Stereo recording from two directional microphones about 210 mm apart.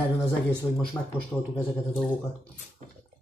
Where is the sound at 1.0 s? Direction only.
15° left (ahead or behind).